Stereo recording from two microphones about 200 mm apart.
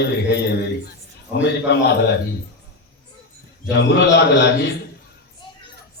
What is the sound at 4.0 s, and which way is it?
Speech, 60° left (ahead or behind).